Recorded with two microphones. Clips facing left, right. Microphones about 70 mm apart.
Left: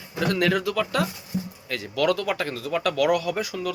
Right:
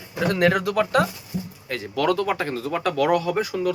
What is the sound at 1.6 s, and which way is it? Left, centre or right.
Speech, right.